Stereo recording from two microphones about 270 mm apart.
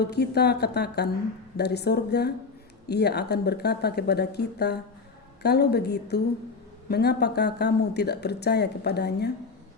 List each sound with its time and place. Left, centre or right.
0.0 s speech: left